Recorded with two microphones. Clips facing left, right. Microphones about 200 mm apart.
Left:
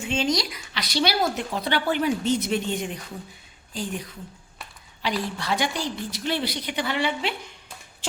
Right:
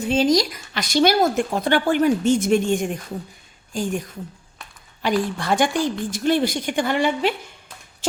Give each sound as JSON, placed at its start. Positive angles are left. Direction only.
{"t": 0.0, "sound": "a woman's voice", "side_deg": -40}